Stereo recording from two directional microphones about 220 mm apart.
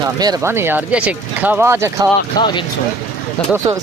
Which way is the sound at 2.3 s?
20° left (ahead or behind).